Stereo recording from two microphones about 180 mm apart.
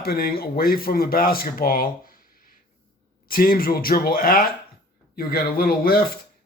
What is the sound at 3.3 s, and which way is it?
A man's voice, 55° left (ahead or behind).